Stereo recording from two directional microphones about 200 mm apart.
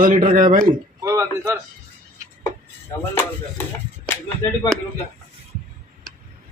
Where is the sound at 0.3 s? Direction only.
40° right (ahead or behind).